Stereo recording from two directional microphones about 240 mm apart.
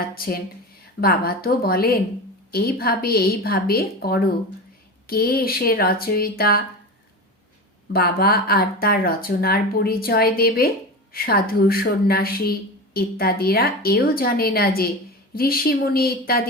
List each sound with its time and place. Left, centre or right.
1.0 s a woman's voice: left
7.9 s a woman's voice: left